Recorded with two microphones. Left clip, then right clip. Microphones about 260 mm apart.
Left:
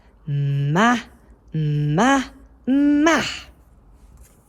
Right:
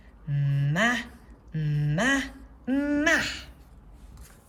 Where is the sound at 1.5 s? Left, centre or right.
Centre.